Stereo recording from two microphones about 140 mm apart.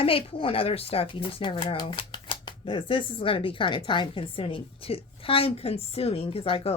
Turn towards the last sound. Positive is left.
turn(degrees=40)  # may be behind; listen again after turning